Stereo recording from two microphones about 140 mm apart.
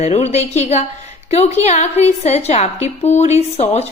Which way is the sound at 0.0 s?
50° left (ahead or behind).